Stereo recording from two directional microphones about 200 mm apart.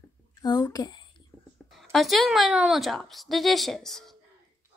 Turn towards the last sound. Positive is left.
turn(degrees=0)  # may be behind; listen again after turning